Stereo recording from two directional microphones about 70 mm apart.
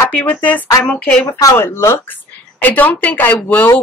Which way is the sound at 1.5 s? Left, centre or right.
Left.